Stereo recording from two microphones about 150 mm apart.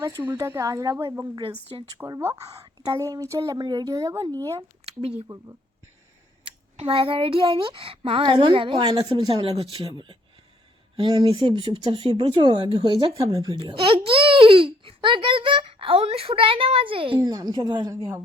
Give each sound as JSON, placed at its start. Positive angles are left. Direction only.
{"t": 0.0, "sound": "a woman's voice", "side_deg": -25}
{"t": 1.4, "sound": "speech", "side_deg": -35}
{"t": 2.0, "sound": "a woman's voice", "side_deg": -15}
{"t": 6.4, "sound": "a woman's voice", "side_deg": -40}
{"t": 17.9, "sound": "speech", "side_deg": -15}